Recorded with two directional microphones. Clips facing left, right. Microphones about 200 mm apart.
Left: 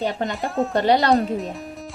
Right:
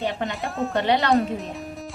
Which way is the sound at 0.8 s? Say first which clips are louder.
Left 3 dB; 35° left (ahead or behind).